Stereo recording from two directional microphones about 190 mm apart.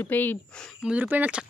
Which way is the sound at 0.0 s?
10° left (ahead or behind).